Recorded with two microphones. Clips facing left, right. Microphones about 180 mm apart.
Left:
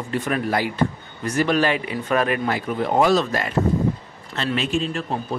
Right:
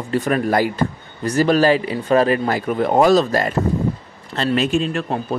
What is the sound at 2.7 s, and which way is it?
Speech, 50° right (ahead or behind).